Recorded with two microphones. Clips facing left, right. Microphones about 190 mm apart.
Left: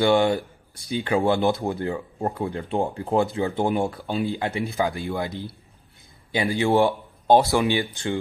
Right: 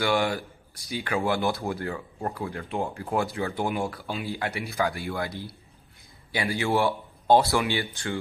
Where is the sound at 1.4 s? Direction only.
15° left (ahead or behind).